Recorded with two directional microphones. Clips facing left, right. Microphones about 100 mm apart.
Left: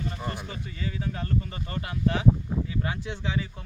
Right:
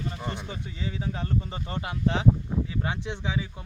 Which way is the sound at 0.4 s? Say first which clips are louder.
Even; 15° right (ahead or behind).